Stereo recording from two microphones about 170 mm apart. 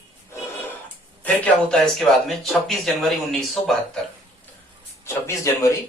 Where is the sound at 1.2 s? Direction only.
10° left (ahead or behind).